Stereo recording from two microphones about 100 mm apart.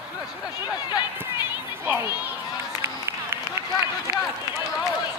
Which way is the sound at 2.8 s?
25° right (ahead or behind).